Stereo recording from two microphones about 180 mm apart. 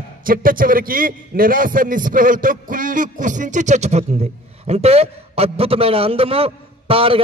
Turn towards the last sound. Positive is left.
turn(degrees=-30)  # may be behind; listen again after turning